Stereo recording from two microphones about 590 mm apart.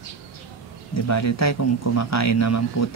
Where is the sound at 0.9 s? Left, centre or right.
Left.